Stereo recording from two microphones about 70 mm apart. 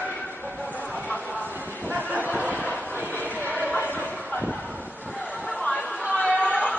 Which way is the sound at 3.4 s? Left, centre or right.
Right.